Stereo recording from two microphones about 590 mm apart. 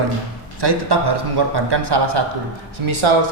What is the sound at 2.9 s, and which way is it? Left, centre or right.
Speech, right.